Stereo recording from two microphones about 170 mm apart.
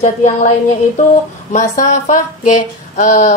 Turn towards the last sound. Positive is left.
turn(degrees=50)  # may be behind; listen again after turning